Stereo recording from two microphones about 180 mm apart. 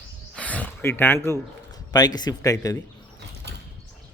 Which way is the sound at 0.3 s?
10° left (ahead or behind).